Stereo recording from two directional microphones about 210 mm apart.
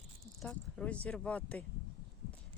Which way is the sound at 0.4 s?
5° left (ahead or behind).